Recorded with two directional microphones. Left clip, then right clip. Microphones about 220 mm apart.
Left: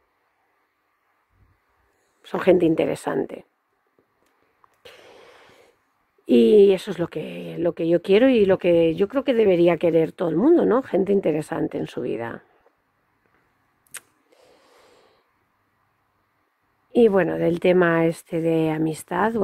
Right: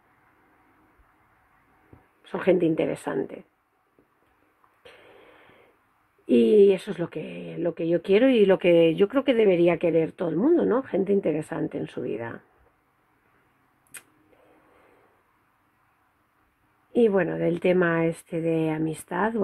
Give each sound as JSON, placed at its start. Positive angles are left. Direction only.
{"t": 2.2, "sound": "speech", "side_deg": 40}
{"t": 4.8, "sound": "a sound", "side_deg": 40}
{"t": 6.2, "sound": "speech", "side_deg": 40}
{"t": 16.9, "sound": "speech", "side_deg": 40}